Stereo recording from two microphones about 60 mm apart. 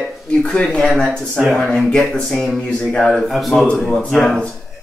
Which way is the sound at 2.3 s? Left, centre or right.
Centre.